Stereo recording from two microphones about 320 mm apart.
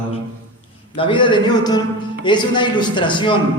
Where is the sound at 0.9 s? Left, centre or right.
Centre.